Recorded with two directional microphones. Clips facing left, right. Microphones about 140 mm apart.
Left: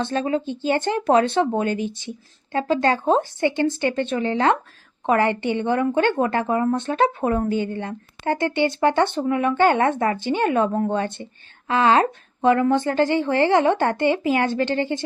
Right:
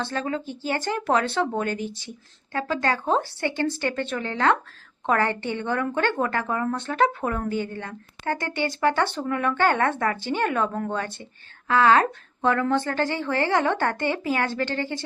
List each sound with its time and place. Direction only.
0.0 s speech: 20° left (ahead or behind)